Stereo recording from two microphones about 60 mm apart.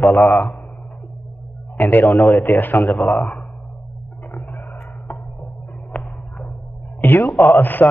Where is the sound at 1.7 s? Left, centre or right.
Left.